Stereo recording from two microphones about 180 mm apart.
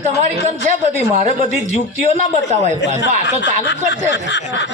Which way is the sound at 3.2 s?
80° left.